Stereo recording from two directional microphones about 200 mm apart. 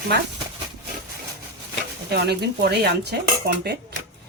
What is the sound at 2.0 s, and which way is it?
Dishes, 55° right (ahead or behind).